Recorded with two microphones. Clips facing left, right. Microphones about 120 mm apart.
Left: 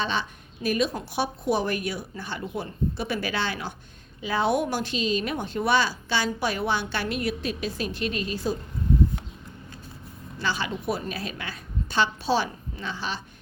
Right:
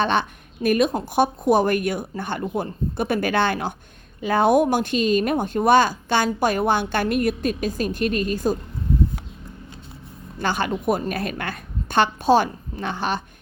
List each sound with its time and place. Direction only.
0.0 s a woman's voice: 60° right (ahead or behind)
10.3 s a woman's voice: 55° right (ahead or behind)